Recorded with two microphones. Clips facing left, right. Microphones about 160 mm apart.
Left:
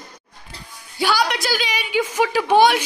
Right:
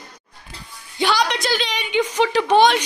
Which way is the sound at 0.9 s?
5° left (ahead or behind).